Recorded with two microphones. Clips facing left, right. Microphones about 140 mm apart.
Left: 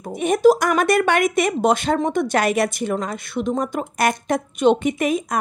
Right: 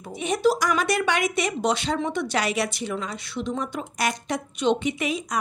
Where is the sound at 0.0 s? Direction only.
50° left (ahead or behind).